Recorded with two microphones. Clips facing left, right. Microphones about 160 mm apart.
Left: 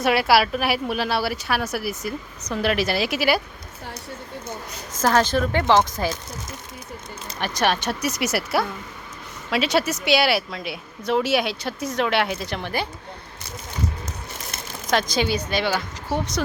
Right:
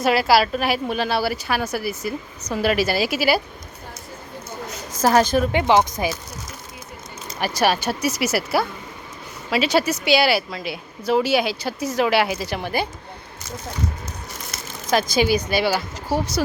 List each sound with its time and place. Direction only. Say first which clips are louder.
0.0 s speech: right 1 dB; centre (ahead or behind)
5.0 s speech: right 3 dB; 10° right (ahead or behind)
7.3 s speech: right 2 dB; 5° right (ahead or behind)
14.8 s speech: right 3 dB; 5° right (ahead or behind)